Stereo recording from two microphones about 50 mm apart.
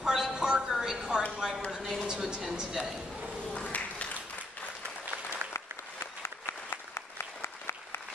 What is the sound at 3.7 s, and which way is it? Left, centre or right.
Applause, left.